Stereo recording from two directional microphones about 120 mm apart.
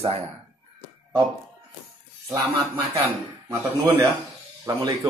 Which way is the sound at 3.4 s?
25° right (ahead or behind).